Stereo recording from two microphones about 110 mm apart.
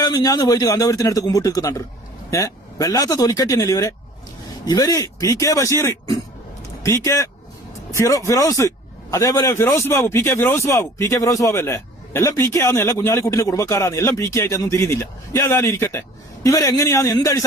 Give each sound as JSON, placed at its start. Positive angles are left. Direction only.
{"t": 0.0, "sound": "a man's voice", "side_deg": 35}